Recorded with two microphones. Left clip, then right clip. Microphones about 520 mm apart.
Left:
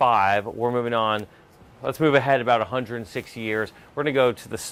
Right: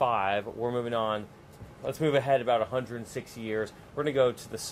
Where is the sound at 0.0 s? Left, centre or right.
Left.